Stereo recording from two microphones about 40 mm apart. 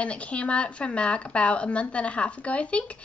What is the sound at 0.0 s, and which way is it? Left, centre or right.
A woman's voice, left.